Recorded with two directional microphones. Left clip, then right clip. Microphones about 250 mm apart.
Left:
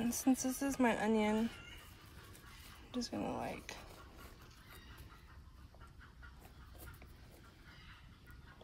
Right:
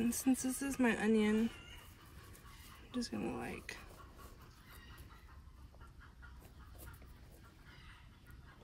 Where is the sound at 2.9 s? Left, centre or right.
Centre.